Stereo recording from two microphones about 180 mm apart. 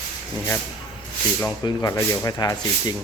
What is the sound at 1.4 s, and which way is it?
Speech, 15° left (ahead or behind).